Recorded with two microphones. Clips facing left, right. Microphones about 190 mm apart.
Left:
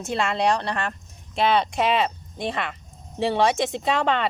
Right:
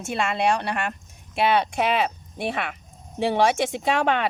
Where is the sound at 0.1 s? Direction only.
5° right (ahead or behind).